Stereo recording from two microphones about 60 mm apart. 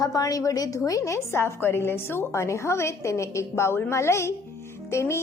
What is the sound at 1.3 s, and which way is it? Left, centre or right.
A woman's voice, left.